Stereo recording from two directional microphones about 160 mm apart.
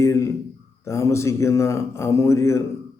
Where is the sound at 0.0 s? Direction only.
20° left (ahead or behind).